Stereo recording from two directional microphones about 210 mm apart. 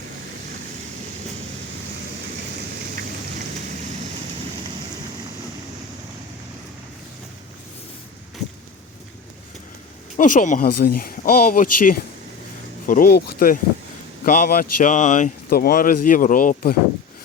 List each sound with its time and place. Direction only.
10.2 s speech: 40° left (ahead or behind)